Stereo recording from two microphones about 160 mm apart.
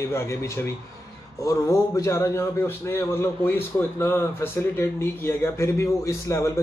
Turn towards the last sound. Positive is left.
turn(degrees=20)  # may be behind; listen again after turning